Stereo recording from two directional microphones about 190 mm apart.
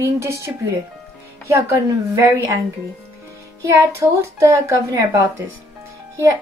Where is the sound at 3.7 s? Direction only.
15° right (ahead or behind).